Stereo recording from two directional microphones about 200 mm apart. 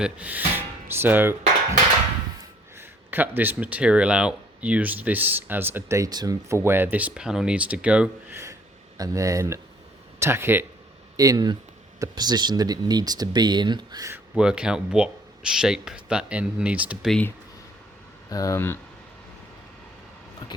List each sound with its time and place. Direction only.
0.0 s speech: 5° right (ahead or behind)
2.7 s speech: 10° right (ahead or behind)
14.3 s speech: 5° right (ahead or behind)
18.3 s speech: 15° left (ahead or behind)